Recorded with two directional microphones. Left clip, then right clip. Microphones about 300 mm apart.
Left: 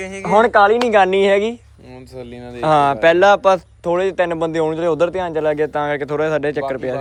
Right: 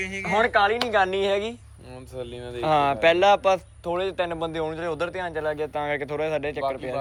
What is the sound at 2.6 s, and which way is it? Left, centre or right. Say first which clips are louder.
Speech: left 7 dB; centre.